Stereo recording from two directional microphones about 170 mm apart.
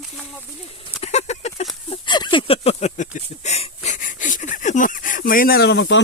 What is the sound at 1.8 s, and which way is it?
Speech, 25° left (ahead or behind).